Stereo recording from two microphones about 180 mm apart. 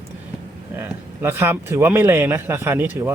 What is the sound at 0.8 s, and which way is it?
A man's voice, 15° right (ahead or behind).